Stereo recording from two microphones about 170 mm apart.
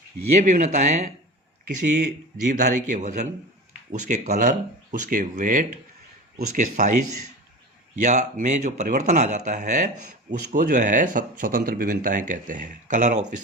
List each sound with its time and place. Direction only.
0.3 s speech: 45° right (ahead or behind)
8.0 s speech: 45° right (ahead or behind)